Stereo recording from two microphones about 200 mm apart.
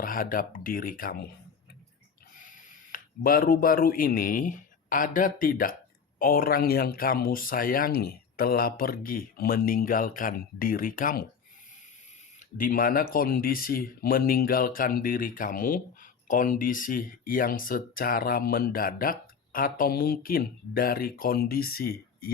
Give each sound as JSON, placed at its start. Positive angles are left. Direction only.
{"t": 0.0, "sound": "speech", "side_deg": 45}
{"t": 2.4, "sound": "speech", "side_deg": 40}
{"t": 12.5, "sound": "speech", "side_deg": 45}